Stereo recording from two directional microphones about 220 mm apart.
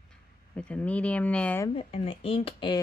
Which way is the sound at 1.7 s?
25° left (ahead or behind).